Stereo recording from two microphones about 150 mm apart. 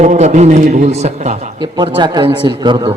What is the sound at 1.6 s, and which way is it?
A man's voice, 30° right (ahead or behind).